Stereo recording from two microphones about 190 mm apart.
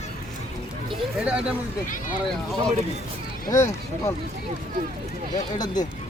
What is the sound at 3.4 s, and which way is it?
Speech, 15° left (ahead or behind).